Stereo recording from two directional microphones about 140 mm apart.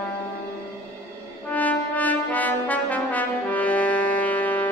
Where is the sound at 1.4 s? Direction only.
10° left (ahead or behind).